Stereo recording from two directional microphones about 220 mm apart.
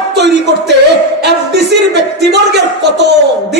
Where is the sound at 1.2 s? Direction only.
50° right (ahead or behind).